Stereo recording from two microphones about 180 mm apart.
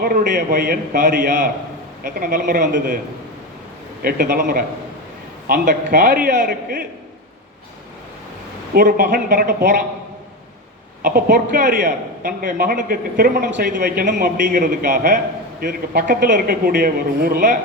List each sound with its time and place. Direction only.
0.0 s a man's voice: 60° right (ahead or behind)
4.0 s a man's voice: 55° right (ahead or behind)
8.7 s a man's voice: 55° right (ahead or behind)
11.0 s a man's voice: 55° right (ahead or behind)